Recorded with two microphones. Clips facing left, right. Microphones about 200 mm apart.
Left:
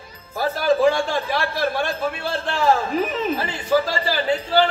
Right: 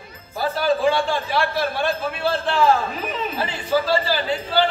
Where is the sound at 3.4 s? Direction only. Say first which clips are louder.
Right 1 dB; 45° left (ahead or behind).